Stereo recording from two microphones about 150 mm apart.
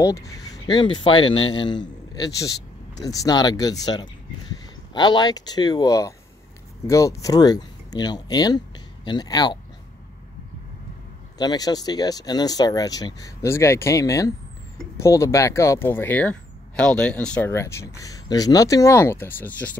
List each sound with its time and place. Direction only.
0.0 s speech: 20° left (ahead or behind)
11.3 s speech: 25° left (ahead or behind); by 17.5 s 10° left (ahead or behind)
17.5 s speech: 20° left (ahead or behind)